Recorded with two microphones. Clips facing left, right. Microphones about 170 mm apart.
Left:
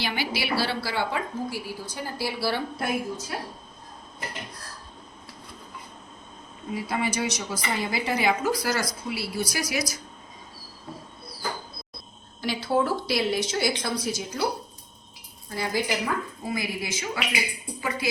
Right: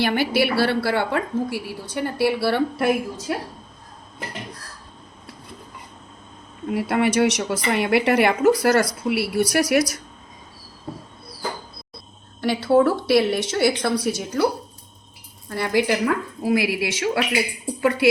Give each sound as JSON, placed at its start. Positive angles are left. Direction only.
{"t": 0.0, "sound": "a woman's voice", "side_deg": -55}
{"t": 6.7, "sound": "speech", "side_deg": -65}
{"t": 12.4, "sound": "a woman's voice", "side_deg": -65}
{"t": 15.4, "sound": "speech", "side_deg": -65}